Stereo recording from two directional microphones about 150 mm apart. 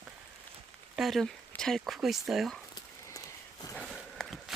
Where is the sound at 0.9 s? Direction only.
Centre (ahead or behind).